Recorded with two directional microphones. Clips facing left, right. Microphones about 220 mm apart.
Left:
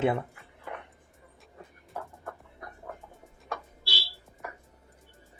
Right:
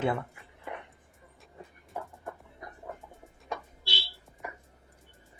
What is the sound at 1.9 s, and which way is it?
Music, centre (ahead or behind).